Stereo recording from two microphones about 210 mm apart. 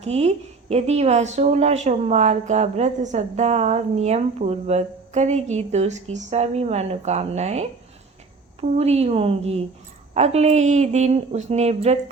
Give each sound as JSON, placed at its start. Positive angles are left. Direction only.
{"t": 0.0, "sound": "a woman's voice", "side_deg": -30}
{"t": 8.6, "sound": "a woman's voice", "side_deg": -30}